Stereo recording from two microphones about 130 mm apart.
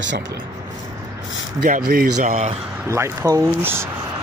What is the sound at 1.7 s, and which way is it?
Speech, 80° right.